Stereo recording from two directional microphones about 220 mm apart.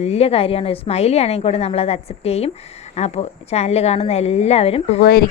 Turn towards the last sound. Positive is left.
turn(degrees=25)  # may be behind; listen again after turning